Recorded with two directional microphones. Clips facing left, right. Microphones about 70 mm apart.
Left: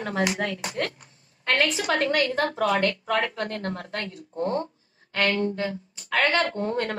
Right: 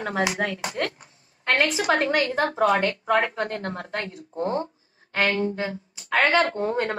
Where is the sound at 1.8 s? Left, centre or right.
Right.